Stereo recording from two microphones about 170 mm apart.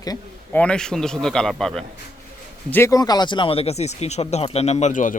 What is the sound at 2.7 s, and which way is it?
Speech, 15° left (ahead or behind).